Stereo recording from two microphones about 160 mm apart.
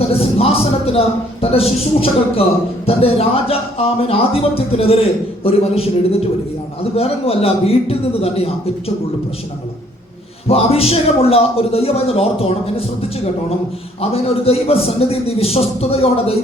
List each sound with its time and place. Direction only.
0.0 s a man's voice: 40° left (ahead or behind)
10.5 s a man's voice: 40° left (ahead or behind)